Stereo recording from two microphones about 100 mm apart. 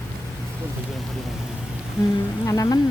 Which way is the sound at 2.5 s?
35° left (ahead or behind).